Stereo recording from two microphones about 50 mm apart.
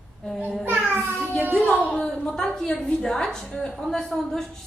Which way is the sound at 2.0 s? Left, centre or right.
Centre.